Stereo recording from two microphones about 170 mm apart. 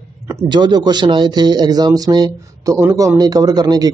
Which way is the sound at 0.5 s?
25° right (ahead or behind).